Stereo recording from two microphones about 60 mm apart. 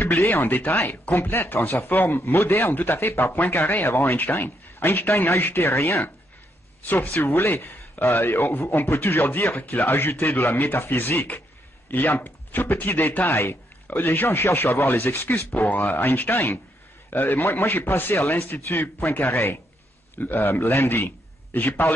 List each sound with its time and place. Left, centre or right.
0.0 s a man's voice: left